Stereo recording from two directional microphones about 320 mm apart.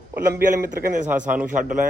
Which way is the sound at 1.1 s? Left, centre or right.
Centre.